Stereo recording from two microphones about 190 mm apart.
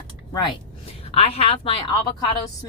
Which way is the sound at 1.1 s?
30° left (ahead or behind).